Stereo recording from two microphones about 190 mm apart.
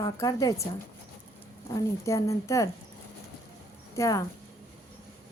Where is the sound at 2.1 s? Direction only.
15° left (ahead or behind).